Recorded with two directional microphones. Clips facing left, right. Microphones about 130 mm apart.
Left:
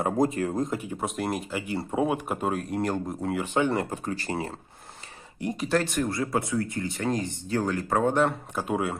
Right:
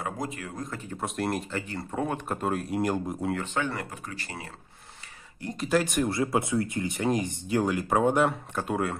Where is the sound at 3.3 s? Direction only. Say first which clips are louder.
Left 8 dB; 15° left (ahead or behind); by 5.4 s 30° left (ahead or behind).